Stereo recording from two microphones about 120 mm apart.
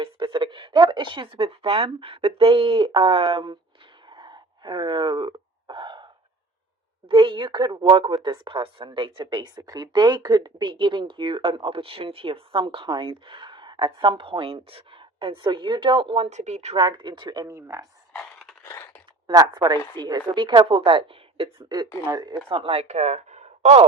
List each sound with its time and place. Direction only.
0.0 s speech: 45° right (ahead or behind)
4.1 s a sound: 40° right (ahead or behind)
7.1 s a woman's voice: 45° right (ahead or behind)
16.3 s speech: 75° right (ahead or behind)
16.7 s speech: 40° right (ahead or behind)
19.3 s a woman's voice: 35° right (ahead or behind); by 21.5 s 50° right (ahead or behind)
22.1 s a woman's voice: 40° right (ahead or behind)
22.8 s speech: 70° right (ahead or behind)